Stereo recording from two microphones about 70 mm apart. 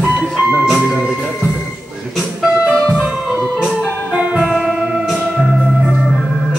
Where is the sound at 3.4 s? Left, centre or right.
Centre.